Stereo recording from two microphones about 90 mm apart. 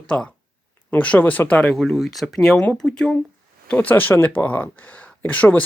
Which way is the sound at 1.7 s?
5° left (ahead or behind).